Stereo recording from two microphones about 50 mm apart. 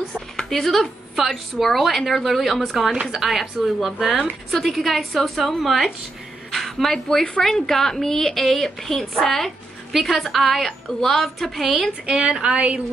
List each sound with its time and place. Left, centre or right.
0.4 s a woman's voice: centre
12.1 s a woman's voice: centre